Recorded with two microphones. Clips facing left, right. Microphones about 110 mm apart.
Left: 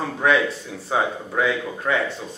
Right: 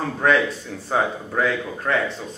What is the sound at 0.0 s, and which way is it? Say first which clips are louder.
A man's voice: even; 5° left (ahead or behind).